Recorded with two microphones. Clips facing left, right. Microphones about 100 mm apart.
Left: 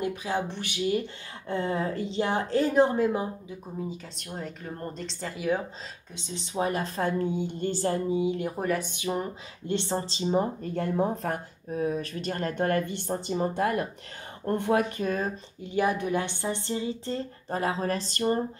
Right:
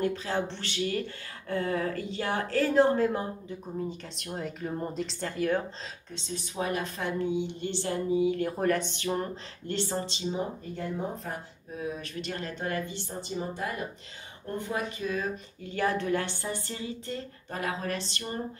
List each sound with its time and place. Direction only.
0.0 s a woman's voice: 15° left (ahead or behind)
6.1 s a woman's voice: 20° left (ahead or behind)
8.5 s speech: 5° left (ahead or behind)
9.8 s a woman's voice: 25° left (ahead or behind)
10.1 s a woman's voice: 35° left (ahead or behind)
10.6 s speech: 60° left (ahead or behind); by 15.3 s 45° left (ahead or behind)
15.6 s a woman's voice: 15° left (ahead or behind); by 18.4 s 40° left (ahead or behind)